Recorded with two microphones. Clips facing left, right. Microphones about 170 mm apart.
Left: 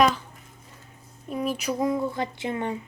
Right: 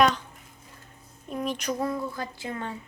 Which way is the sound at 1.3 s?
5° left (ahead or behind).